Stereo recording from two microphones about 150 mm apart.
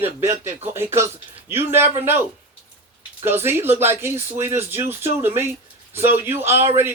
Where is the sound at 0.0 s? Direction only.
15° right (ahead or behind).